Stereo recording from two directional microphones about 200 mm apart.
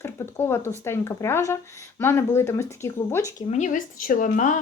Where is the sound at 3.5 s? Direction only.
35° left (ahead or behind).